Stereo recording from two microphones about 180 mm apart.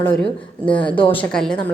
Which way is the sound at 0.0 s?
10° left (ahead or behind).